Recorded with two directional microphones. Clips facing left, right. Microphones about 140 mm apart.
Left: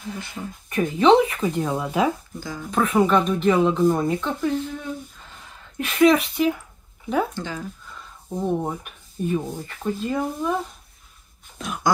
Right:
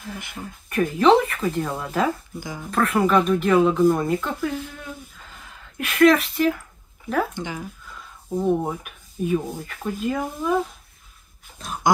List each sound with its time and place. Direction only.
0.7 s speech: 5° right (ahead or behind)
7.3 s speech: 15° right (ahead or behind)
8.4 s speech: 5° right (ahead or behind)